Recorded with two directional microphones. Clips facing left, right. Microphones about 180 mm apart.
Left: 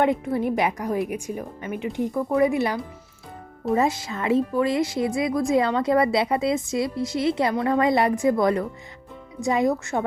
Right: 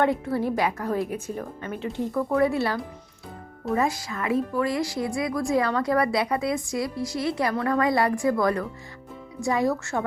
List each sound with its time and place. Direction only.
0.0 s a woman's voice: 20° left (ahead or behind)